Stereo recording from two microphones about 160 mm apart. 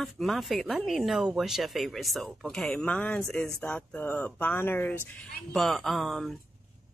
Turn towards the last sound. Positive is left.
turn(degrees=0)  # may be behind; listen again after turning